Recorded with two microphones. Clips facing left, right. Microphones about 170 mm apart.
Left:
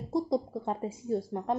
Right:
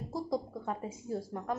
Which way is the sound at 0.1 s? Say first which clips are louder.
Left 6 dB; 25° left (ahead or behind).